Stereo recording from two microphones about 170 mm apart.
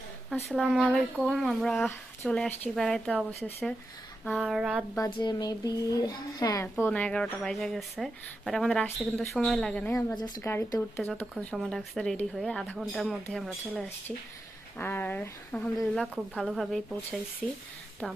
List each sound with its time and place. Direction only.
0.4 s speech: centre (ahead or behind)
4.9 s a child's voice: 20° left (ahead or behind); by 9.9 s 5° left (ahead or behind)
10.2 s a child's voice: 25° left (ahead or behind)
11.5 s a child's voice: centre (ahead or behind)